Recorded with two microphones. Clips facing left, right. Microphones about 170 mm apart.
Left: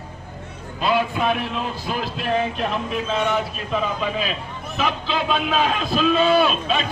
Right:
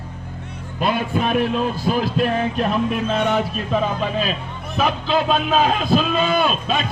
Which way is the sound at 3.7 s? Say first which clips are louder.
Right 2 dB; 40° right (ahead or behind).